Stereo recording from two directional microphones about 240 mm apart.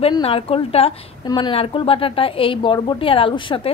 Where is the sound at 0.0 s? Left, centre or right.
Left.